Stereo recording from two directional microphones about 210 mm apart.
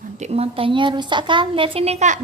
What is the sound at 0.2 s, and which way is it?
A woman's voice, 25° right (ahead or behind).